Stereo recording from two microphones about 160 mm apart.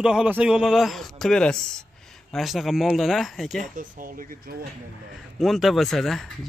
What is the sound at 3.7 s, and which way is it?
Speech, 60° right (ahead or behind).